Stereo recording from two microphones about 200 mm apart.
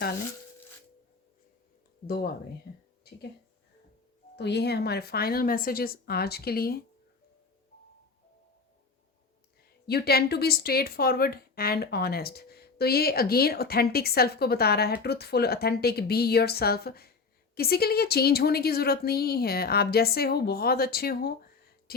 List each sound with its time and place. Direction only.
4.4 s speech: 55° left (ahead or behind)
9.8 s speech: 50° left (ahead or behind)